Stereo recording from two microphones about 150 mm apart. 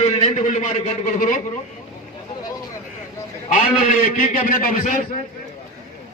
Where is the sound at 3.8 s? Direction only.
60° left (ahead or behind).